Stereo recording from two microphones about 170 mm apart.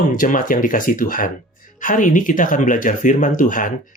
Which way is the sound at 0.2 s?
50° left (ahead or behind).